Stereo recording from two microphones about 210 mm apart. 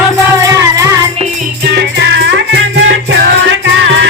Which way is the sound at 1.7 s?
55° right (ahead or behind).